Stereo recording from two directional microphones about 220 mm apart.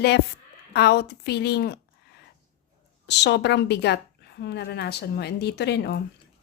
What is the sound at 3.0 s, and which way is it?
A woman's voice, 50° left (ahead or behind).